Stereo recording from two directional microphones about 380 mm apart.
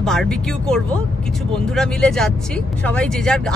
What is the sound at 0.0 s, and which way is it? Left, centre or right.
Speech, centre.